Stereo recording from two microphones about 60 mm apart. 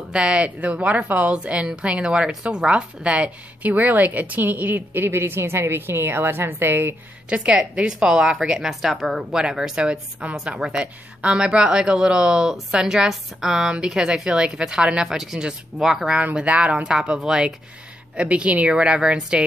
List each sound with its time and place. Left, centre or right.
0.1 s a woman's voice: centre; by 7.0 s right
7.2 s a woman's voice: centre
11.1 s a woman's voice: right; by 16.2 s centre
16.2 s a woman's voice: right